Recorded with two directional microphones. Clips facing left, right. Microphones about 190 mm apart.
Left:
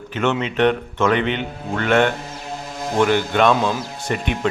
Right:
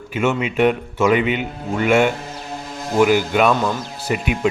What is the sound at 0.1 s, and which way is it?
A man's voice, 10° right (ahead or behind).